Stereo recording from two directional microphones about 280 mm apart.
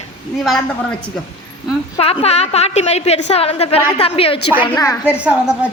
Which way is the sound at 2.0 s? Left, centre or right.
Left.